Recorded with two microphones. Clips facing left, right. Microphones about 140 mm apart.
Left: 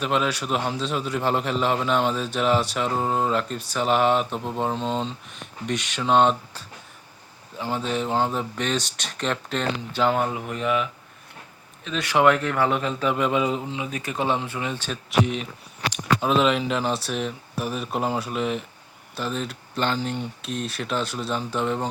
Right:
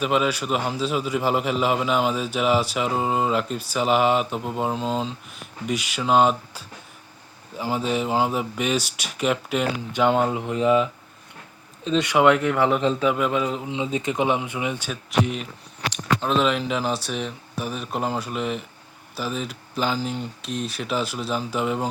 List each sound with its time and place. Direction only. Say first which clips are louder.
0.0 s a man's voice: right 2 dB; 5° right (ahead or behind)
10.2 s mantra: right 4 dB; 20° right (ahead or behind)
11.9 s mantra: right 7 dB; 25° right (ahead or behind)
12.1 s speech: even; 15° right (ahead or behind)
13.0 s a man's voice: right 1 dB; 5° right (ahead or behind)
13.7 s speech: right 5 dB; 20° right (ahead or behind)
15.9 s a man's voice: left 1 dB; 5° left (ahead or behind)